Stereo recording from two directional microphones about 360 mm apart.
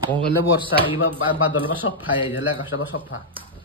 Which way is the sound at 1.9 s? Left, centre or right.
Left.